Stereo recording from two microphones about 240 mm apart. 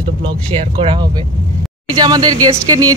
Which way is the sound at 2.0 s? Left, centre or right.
Centre.